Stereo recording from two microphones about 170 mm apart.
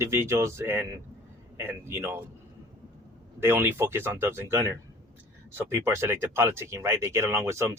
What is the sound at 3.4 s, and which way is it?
Speech, 15° right (ahead or behind).